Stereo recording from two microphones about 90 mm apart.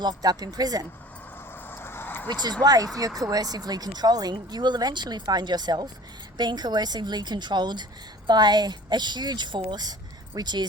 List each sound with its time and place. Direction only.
0.0 s speech: 50° right (ahead or behind)
1.7 s a sound: 25° left (ahead or behind)
2.2 s speech: 50° right (ahead or behind)